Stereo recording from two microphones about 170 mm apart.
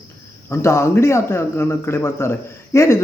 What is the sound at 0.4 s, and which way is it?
Speech, 15° left (ahead or behind).